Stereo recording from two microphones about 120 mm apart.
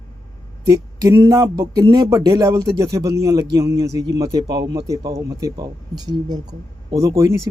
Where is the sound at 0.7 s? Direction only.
30° right (ahead or behind).